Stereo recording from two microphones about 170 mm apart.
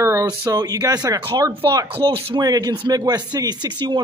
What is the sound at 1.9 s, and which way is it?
A man's voice, 30° right (ahead or behind).